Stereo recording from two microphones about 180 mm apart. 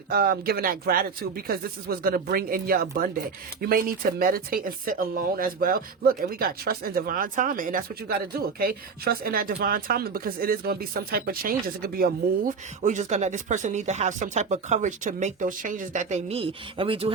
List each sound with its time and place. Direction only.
0.1 s speech: 55° right (ahead or behind); by 17.1 s 30° right (ahead or behind)